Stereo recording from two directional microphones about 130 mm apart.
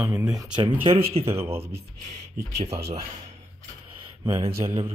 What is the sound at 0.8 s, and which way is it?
Mantra, 50° right (ahead or behind).